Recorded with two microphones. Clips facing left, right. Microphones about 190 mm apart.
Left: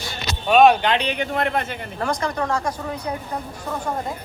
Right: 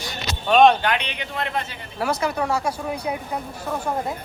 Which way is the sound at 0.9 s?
45° left (ahead or behind).